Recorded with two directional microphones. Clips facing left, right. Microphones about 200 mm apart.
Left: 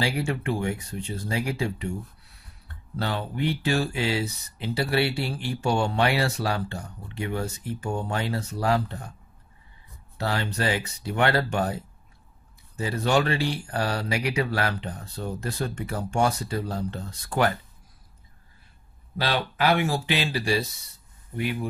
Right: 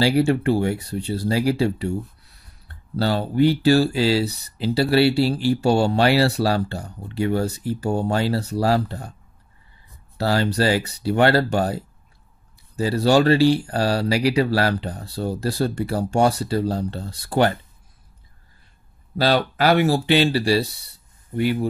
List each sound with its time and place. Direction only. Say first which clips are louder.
0.0 s speech: right 9 dB; 30° right (ahead or behind)
3.0 s speech: right 9 dB; 35° right (ahead or behind)
10.1 s speech: right 8 dB; 35° right (ahead or behind)
19.1 s speech: right 7 dB; 35° right (ahead or behind)